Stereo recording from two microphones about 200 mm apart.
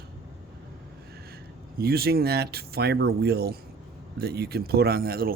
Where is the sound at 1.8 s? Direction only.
50° right (ahead or behind).